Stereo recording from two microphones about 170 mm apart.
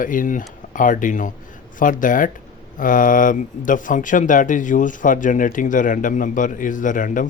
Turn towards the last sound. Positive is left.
turn(degrees=50)  # may be behind; listen again after turning